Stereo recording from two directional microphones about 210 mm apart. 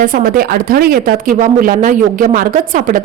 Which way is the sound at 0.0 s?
40° right (ahead or behind).